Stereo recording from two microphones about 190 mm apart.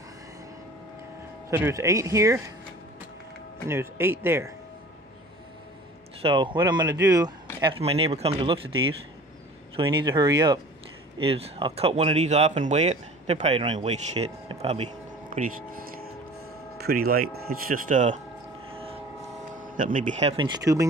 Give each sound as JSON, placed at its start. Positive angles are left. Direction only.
{"t": 1.5, "sound": "speech", "side_deg": -15}
{"t": 3.6, "sound": "speech", "side_deg": -15}
{"t": 6.2, "sound": "speech", "side_deg": -25}
{"t": 7.6, "sound": "speech", "side_deg": -30}
{"t": 9.8, "sound": "speech", "side_deg": -25}
{"t": 16.8, "sound": "speech", "side_deg": -55}
{"t": 18.7, "sound": "train", "side_deg": -30}
{"t": 19.5, "sound": "speech", "side_deg": -45}